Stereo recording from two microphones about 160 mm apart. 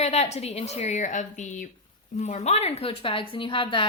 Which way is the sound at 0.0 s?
45° left (ahead or behind).